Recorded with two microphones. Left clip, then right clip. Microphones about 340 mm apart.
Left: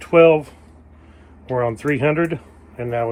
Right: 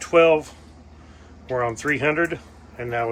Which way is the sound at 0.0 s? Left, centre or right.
Centre.